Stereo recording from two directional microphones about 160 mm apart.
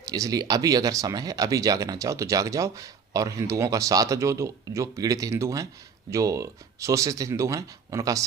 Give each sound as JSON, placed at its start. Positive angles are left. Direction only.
{"t": 0.1, "sound": "speech", "side_deg": -25}